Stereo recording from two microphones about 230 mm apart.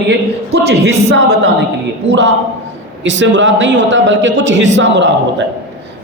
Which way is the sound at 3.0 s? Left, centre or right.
Right.